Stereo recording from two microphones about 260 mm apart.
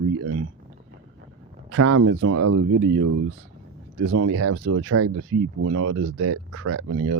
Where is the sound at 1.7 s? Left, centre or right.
Right.